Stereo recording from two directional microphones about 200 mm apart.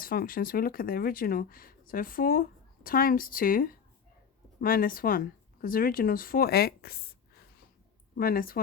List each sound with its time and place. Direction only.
0.0 s speech: 45° left (ahead or behind)
8.1 s speech: 45° left (ahead or behind)